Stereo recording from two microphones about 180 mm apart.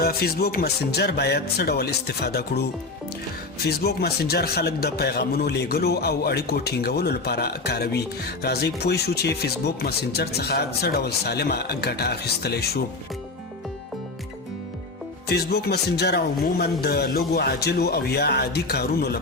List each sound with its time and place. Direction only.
0.0 s a man's voice: 60° left (ahead or behind)
15.3 s a man's voice: 60° left (ahead or behind)